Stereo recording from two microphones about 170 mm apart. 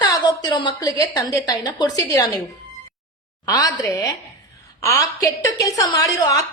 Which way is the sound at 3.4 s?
20° left (ahead or behind).